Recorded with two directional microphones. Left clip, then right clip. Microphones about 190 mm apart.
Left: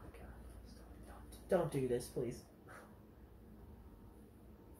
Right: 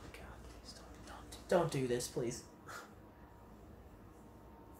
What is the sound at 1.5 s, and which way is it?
Speech, 15° right (ahead or behind).